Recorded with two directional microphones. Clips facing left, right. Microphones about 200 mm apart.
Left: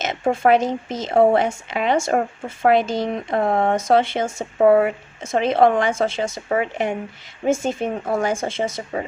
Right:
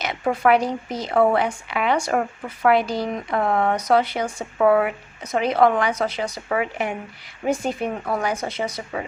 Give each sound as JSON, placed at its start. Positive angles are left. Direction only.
{"t": 0.0, "sound": "speech", "side_deg": 25}